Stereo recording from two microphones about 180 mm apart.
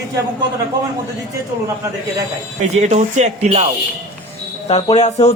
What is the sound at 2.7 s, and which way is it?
Speech, 40° right (ahead or behind).